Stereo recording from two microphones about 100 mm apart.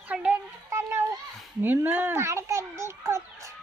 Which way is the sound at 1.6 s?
20° right (ahead or behind).